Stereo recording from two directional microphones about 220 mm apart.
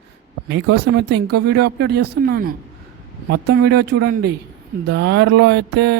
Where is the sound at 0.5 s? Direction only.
50° right (ahead or behind).